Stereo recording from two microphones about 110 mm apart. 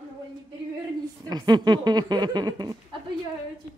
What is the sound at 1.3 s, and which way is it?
Speech, 40° right (ahead or behind).